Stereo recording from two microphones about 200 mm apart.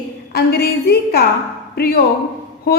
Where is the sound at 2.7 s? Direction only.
50° left (ahead or behind).